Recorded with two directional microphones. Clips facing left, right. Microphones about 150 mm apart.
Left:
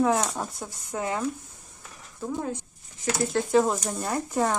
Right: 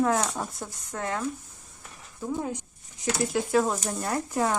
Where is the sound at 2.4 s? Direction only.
15° right (ahead or behind).